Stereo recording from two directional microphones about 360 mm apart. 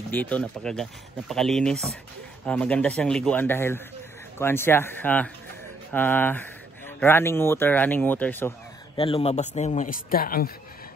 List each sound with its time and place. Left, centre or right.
0.1 s a man's voice: centre; by 10.5 s left